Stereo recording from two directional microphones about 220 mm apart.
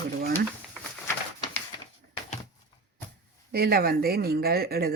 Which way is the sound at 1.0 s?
10° left (ahead or behind).